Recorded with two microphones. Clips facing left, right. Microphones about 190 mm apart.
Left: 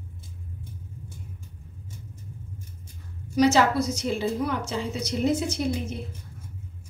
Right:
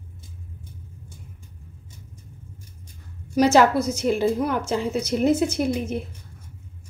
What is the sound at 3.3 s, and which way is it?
Speech, 55° right (ahead or behind).